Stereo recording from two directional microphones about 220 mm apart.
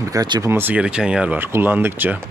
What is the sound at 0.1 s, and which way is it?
Speech, 15° right (ahead or behind).